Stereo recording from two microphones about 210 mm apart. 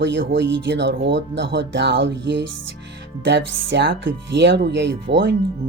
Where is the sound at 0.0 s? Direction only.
55° right (ahead or behind).